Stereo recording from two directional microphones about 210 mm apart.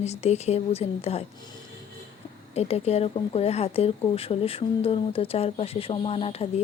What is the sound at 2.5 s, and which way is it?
Speech, 30° left (ahead or behind).